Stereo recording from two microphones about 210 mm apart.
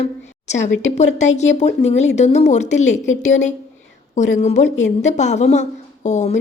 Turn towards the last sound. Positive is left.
turn(degrees=35)  # may be behind; listen again after turning